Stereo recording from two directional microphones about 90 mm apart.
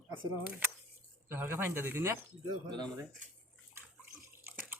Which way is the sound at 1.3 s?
25° right (ahead or behind).